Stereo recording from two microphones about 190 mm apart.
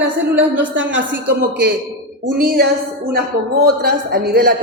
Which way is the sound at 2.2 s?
55° right (ahead or behind).